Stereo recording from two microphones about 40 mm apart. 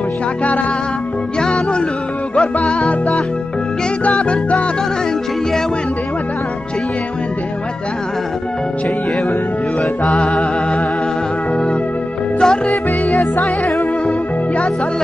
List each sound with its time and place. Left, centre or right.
1.4 s music: left
4.2 s music: left
12.4 s music: left
13.1 s music: centre